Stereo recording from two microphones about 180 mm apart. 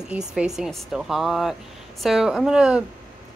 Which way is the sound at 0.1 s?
5° right (ahead or behind).